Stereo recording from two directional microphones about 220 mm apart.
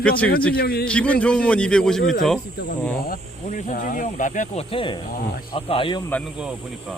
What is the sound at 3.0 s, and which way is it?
Speech, 40° left (ahead or behind).